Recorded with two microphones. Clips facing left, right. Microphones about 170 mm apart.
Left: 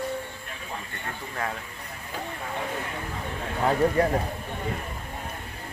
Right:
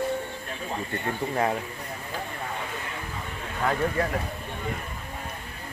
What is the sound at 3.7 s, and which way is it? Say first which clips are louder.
Speech: left 4 dB; 30° left (ahead or behind).